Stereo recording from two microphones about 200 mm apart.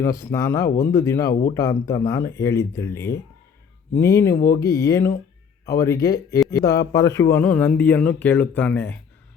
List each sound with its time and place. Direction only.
0.0 s speech: 15° left (ahead or behind)
1.3 s speech: 45° left (ahead or behind)
1.5 s speech: 15° left (ahead or behind)